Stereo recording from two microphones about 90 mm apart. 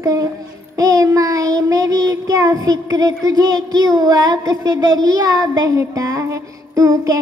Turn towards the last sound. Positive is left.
turn(degrees=-40)  # may be behind; listen again after turning